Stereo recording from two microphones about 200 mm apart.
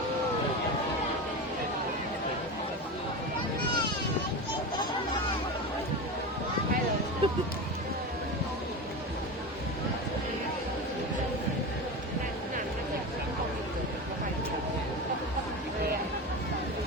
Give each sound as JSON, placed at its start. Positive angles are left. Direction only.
{"t": 7.2, "sound": "run", "side_deg": -30}